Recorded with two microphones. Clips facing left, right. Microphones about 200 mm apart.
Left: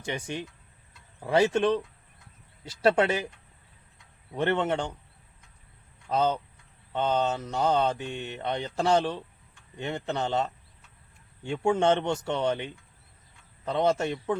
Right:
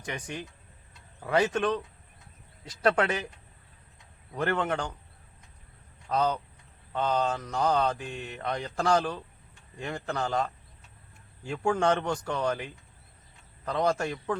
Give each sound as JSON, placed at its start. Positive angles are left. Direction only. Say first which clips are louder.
{"t": 0.0, "sound": "mantra", "louder": "left 3 dB", "side_deg": 25}
{"t": 4.4, "sound": "mantra", "louder": "left 2 dB", "side_deg": 25}
{"t": 6.1, "sound": "mantra", "louder": "left 2 dB", "side_deg": 25}